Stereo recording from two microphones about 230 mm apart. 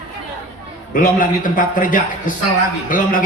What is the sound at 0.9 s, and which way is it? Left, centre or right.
A man's voice, left.